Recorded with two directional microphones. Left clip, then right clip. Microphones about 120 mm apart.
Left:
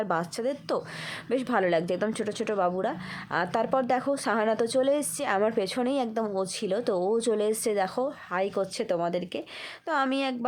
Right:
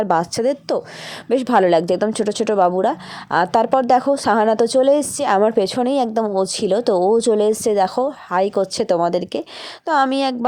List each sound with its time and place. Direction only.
0.0 s a woman's voice: 40° right (ahead or behind)